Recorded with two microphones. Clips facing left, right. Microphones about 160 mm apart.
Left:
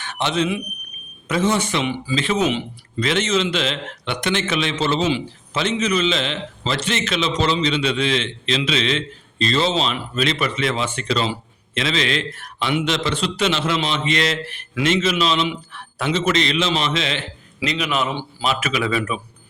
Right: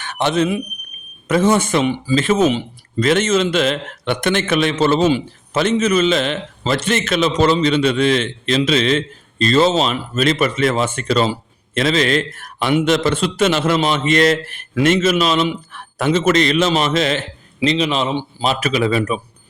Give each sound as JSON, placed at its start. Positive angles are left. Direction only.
{"t": 0.0, "sound": "a man's voice", "side_deg": -50}
{"t": 17.6, "sound": "speech", "side_deg": -30}
{"t": 18.4, "sound": "speech", "side_deg": -35}